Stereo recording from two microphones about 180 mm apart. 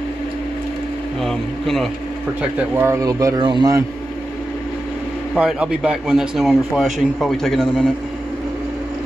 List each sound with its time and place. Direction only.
1.2 s speech: centre (ahead or behind)
2.7 s speech: 15° right (ahead or behind)
5.3 s speech: 5° right (ahead or behind)